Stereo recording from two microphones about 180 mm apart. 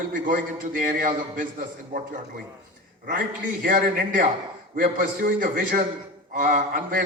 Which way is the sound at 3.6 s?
50° right (ahead or behind).